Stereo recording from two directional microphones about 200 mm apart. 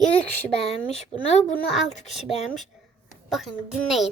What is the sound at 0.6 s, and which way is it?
Speech, 30° left (ahead or behind).